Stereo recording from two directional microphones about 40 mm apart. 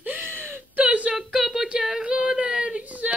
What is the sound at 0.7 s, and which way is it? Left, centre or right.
Whimper, right.